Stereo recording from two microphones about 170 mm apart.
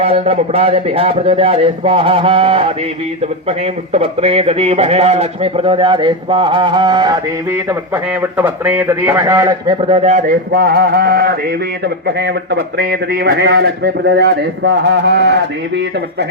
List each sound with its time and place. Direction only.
0.0 s a man's voice: 35° right (ahead or behind)
3.9 s a man's voice: 35° right (ahead or behind)
8.2 s a man's voice: 10° right (ahead or behind)
9.9 s speech: 40° right (ahead or behind); by 15.8 s 85° right